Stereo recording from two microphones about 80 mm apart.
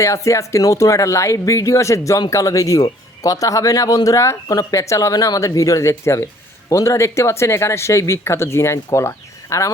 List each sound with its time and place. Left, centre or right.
0.0 s speech: left